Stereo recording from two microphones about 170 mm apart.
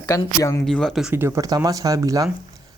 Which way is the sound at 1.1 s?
15° right (ahead or behind).